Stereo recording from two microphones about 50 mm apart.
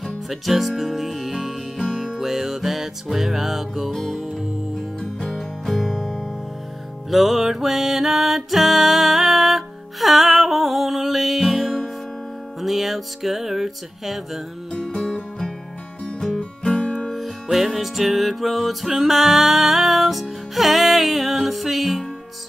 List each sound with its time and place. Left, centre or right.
0.0 s music: centre
14.7 s music: centre
17.1 s music: centre